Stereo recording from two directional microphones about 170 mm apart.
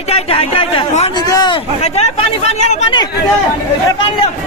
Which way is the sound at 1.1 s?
25° left (ahead or behind).